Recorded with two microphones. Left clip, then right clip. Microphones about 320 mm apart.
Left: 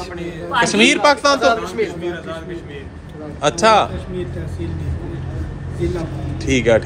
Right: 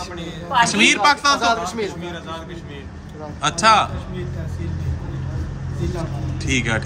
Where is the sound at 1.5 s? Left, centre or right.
Right.